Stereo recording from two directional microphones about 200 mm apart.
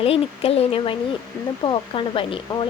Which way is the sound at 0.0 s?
30° left (ahead or behind).